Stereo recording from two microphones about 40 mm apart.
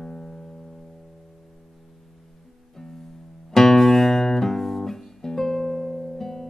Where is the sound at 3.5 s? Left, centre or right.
Centre.